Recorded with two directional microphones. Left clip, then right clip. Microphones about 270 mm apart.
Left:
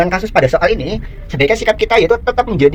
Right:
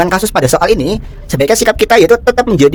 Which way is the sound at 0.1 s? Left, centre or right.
Right.